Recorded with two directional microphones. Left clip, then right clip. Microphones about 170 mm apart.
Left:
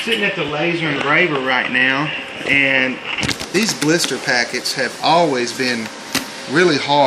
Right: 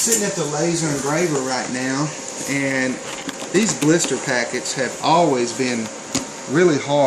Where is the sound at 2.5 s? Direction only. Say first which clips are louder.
Left 7 dB; 15° right (ahead or behind).